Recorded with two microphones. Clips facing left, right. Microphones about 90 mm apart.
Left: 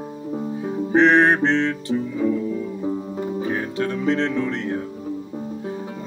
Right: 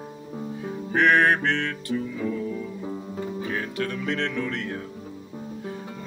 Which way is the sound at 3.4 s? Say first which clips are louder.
Left 5 dB; 25° left (ahead or behind).